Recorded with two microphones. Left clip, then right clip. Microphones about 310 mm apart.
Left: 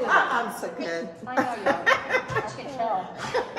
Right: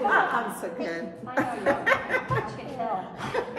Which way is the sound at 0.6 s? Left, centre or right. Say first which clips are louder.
Left 1 dB; centre.